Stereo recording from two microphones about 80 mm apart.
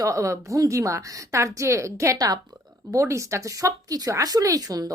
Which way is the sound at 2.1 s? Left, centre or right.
Right.